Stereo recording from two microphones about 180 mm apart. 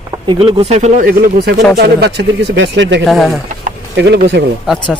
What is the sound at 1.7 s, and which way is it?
Speech, 65° right (ahead or behind).